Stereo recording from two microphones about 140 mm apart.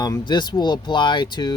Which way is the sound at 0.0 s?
30° left (ahead or behind).